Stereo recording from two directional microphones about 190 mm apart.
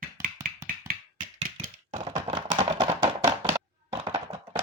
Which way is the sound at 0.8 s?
45° right (ahead or behind).